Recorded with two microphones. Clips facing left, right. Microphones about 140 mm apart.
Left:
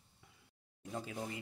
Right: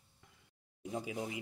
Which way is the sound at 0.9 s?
15° right (ahead or behind).